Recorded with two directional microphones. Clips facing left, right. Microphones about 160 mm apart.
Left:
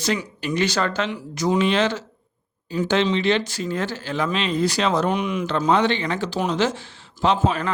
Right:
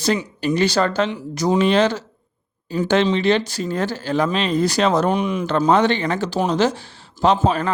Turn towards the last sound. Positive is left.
turn(degrees=-40)  # may be behind; listen again after turning